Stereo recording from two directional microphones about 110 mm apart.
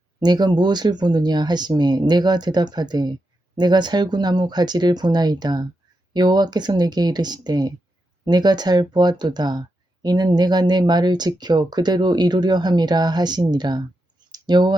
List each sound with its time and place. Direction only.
0.2 s speech: 40° right (ahead or behind)